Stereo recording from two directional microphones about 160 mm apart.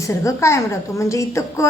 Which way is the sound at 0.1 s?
20° left (ahead or behind).